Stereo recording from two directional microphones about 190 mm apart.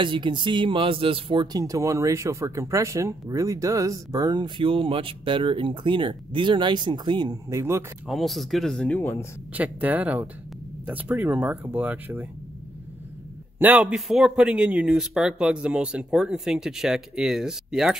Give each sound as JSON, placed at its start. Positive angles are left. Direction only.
{"t": 0.0, "sound": "speech", "side_deg": -25}
{"t": 8.1, "sound": "speech", "side_deg": 0}
{"t": 9.5, "sound": "speech", "side_deg": -10}
{"t": 13.6, "sound": "speech", "side_deg": -10}